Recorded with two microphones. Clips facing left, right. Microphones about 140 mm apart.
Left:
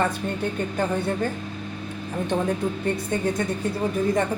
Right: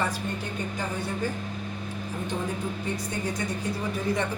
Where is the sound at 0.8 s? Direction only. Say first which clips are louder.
Left 7 dB; 55° left (ahead or behind).